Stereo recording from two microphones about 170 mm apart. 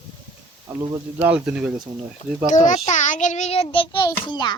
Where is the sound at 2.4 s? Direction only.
45° left (ahead or behind); by 4.5 s 25° left (ahead or behind).